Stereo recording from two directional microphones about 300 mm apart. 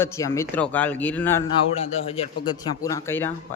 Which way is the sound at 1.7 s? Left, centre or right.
Centre.